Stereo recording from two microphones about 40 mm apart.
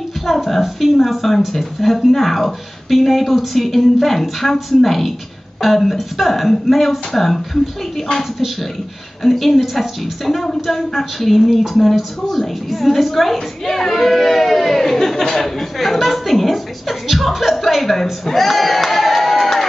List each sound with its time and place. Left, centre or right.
0.3 s a woman's voice: centre
9.2 s a woman's voice: centre
18.2 s a sound: centre